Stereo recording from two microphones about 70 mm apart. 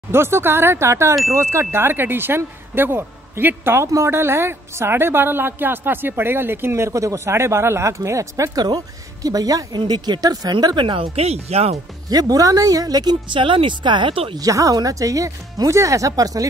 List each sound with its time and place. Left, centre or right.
0.1 s a woman's voice: right
8.6 s speech: right
12.1 s speech: right
14.5 s speech: right